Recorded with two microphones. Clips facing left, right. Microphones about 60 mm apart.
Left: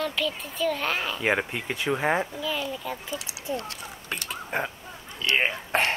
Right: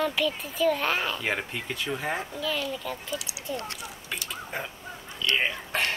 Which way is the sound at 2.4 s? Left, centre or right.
Centre.